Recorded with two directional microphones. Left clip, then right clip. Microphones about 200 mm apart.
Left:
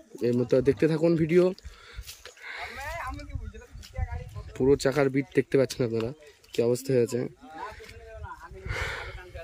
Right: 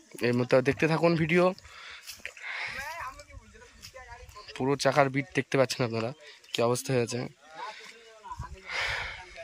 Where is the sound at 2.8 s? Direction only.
45° left (ahead or behind).